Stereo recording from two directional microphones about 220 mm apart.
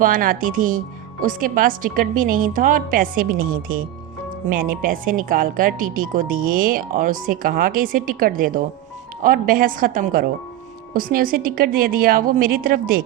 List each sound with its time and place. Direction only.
0.0 s speech: 40° right (ahead or behind)